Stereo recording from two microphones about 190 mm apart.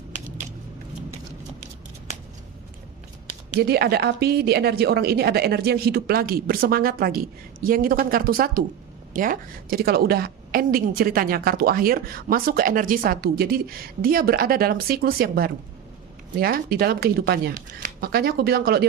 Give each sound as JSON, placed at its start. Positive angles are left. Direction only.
{"t": 3.6, "sound": "a woman's voice", "side_deg": -55}